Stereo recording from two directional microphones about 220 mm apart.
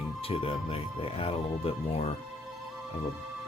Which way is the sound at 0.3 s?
25° left (ahead or behind).